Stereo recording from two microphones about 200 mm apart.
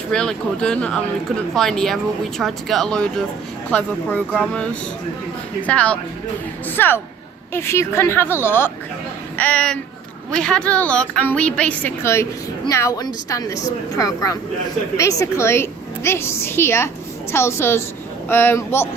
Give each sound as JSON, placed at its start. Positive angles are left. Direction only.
{"t": 0.1, "sound": "a woman's voice", "side_deg": 5}